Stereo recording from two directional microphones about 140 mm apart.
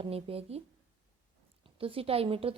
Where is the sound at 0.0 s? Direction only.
45° right (ahead or behind).